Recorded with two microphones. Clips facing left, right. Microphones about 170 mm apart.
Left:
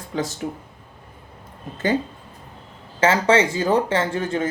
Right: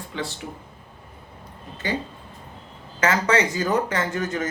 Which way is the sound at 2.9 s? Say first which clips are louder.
Left 4 dB; 30° left (ahead or behind).